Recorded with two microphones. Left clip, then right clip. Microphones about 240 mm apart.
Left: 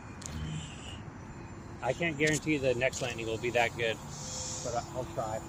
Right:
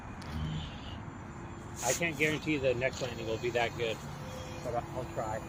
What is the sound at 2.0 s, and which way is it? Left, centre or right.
Speech, left.